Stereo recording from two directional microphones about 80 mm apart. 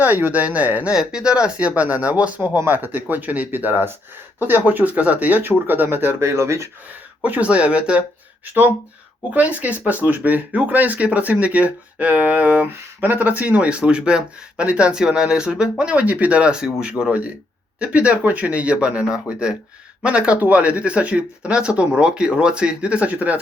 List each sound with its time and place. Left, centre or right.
0.0 s speech: right
7.2 s speech: centre
9.3 s speech: centre